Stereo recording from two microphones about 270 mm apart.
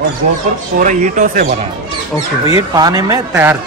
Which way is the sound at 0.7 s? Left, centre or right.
Right.